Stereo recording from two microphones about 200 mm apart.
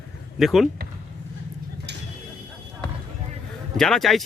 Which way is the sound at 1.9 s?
55° right (ahead or behind).